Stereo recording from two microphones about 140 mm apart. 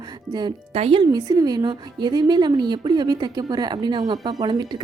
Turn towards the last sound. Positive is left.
turn(degrees=-30)  # may be behind; listen again after turning